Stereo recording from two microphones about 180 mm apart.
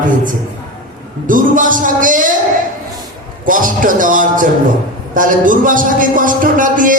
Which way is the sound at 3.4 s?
50° right (ahead or behind).